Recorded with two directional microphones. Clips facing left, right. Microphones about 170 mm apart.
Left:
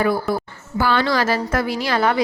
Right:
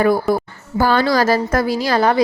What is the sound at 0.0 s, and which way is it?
A woman's voice, 45° right (ahead or behind).